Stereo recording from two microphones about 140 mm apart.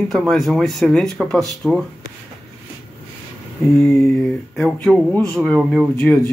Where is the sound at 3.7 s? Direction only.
Centre (ahead or behind).